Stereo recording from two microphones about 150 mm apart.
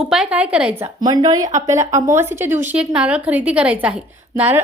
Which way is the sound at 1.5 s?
55° right (ahead or behind).